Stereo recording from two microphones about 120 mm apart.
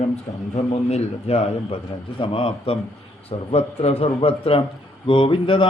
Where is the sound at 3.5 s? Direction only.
65° left (ahead or behind).